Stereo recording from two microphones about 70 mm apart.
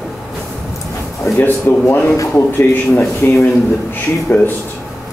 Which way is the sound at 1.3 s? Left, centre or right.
Left.